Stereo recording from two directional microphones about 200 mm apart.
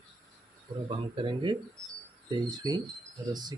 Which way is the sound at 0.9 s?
25° right (ahead or behind).